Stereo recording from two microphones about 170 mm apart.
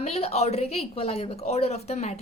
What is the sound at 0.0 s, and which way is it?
A woman's voice, 40° left (ahead or behind).